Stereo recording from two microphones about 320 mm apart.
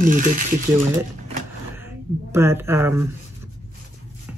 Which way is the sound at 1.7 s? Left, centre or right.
Centre.